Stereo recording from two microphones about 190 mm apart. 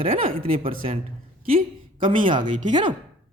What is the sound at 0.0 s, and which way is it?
Speech, 30° right (ahead or behind).